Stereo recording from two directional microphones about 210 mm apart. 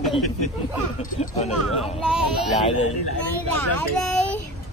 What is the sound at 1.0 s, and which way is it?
Speech, 40° left (ahead or behind).